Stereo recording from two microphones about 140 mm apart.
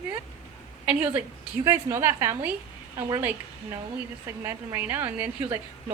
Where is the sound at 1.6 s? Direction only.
20° right (ahead or behind).